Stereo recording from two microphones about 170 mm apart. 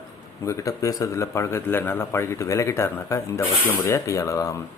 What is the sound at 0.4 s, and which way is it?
A man's voice, 20° left (ahead or behind).